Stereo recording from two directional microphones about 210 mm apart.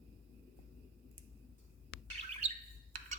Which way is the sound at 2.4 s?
30° right (ahead or behind).